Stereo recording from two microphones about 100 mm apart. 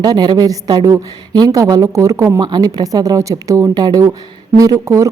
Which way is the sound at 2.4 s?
40° right (ahead or behind).